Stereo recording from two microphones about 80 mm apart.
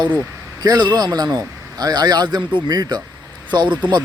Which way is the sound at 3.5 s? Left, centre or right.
Right.